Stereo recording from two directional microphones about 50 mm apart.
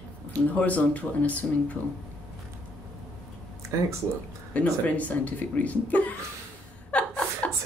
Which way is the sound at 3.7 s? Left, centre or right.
Right.